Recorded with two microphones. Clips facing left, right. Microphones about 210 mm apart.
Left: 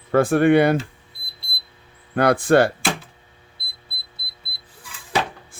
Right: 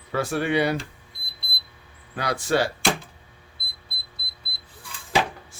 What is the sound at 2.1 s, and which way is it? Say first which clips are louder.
Speech: left 8 dB; 55° left (ahead or behind).